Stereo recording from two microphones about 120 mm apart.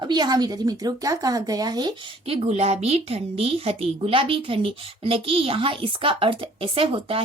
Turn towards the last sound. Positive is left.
turn(degrees=-50)  # may be behind; listen again after turning